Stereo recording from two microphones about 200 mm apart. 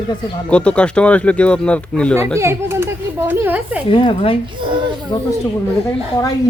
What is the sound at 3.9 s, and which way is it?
Speech, 25° left (ahead or behind).